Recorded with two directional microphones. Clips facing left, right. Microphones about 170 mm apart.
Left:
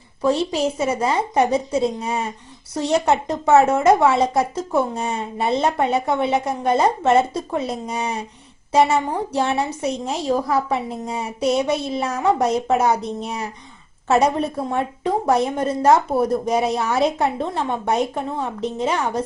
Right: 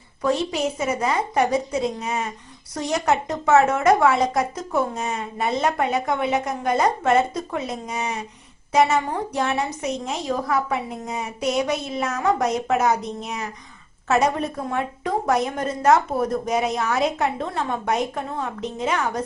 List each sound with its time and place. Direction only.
0.2 s a woman's voice: 30° left (ahead or behind)
14.7 s a woman's voice: 30° left (ahead or behind)